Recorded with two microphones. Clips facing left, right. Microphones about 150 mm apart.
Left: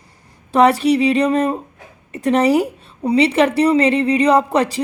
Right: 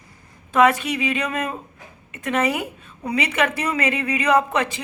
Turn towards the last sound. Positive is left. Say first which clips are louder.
# left 4 dB
turn(degrees=35)  # may be behind; listen again after turning